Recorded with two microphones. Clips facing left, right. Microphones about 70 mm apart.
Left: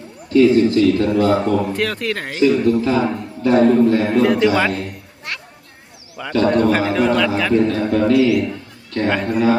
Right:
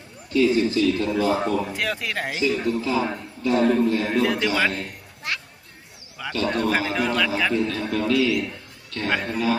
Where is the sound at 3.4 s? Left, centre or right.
Left.